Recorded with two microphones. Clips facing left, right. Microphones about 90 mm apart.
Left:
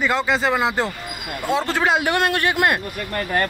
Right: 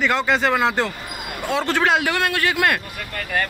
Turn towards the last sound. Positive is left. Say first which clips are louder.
# left 3 dB
turn(degrees=35)  # may be behind; listen again after turning